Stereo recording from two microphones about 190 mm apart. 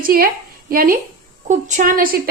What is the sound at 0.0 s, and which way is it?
A woman's voice, 50° right (ahead or behind).